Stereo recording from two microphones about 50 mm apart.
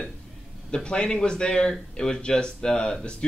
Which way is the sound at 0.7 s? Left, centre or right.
Centre.